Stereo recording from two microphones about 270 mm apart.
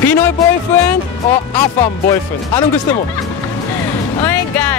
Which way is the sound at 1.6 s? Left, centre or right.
Centre.